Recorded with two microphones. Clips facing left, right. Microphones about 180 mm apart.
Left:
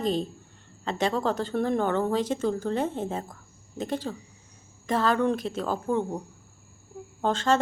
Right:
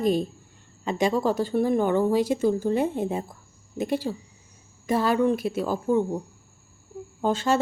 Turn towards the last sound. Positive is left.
turn(degrees=-10)  # may be behind; listen again after turning